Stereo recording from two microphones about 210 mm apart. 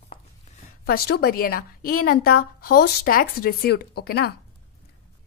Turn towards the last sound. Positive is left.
turn(degrees=50)  # may be behind; listen again after turning